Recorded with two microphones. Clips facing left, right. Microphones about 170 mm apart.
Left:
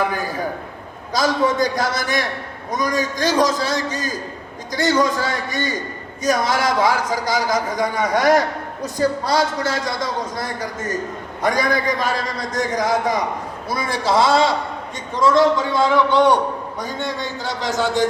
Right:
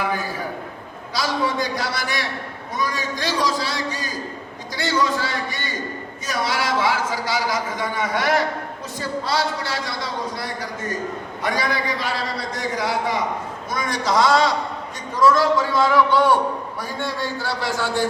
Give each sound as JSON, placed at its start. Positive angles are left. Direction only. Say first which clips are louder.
{"t": 1.1, "sound": "a man's voice", "louder": "left 5 dB", "side_deg": 45}
{"t": 13.7, "sound": "a man's voice", "louder": "left 3 dB", "side_deg": 30}